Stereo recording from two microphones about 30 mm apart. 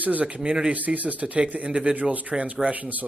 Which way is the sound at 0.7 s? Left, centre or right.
Right.